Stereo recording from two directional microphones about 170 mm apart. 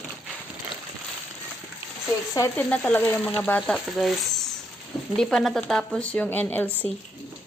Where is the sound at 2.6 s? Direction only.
10° left (ahead or behind).